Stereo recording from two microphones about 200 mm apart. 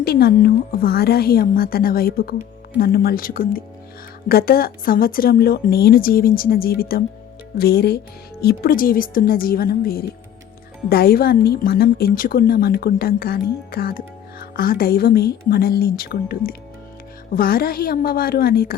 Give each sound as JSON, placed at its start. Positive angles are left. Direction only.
{"t": 0.0, "sound": "a woman's voice", "side_deg": 50}